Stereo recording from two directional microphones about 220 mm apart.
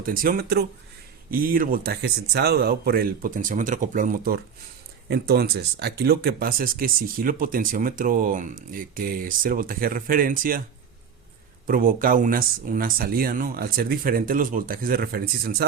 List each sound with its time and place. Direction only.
0.0 s speech: 40° right (ahead or behind)
11.6 s speech: 40° right (ahead or behind)